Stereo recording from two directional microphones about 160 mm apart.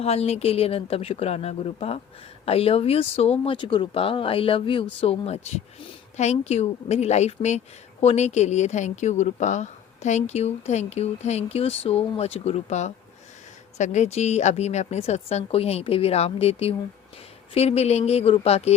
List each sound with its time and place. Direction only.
0.0 s speech: 40° left (ahead or behind)